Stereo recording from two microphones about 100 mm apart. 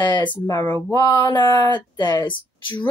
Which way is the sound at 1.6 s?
45° left (ahead or behind).